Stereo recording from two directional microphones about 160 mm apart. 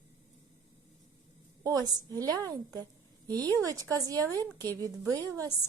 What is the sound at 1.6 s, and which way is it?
Speech, 25° right (ahead or behind).